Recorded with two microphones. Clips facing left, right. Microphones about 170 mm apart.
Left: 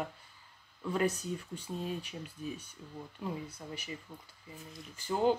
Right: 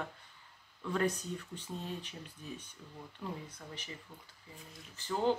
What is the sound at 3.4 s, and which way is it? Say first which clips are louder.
Speech: left 4 dB; 10° left (ahead or behind).